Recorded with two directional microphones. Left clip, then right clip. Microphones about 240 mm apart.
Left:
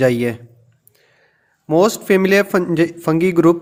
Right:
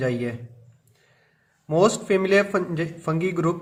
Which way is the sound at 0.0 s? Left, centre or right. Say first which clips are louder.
Left 10 dB; left.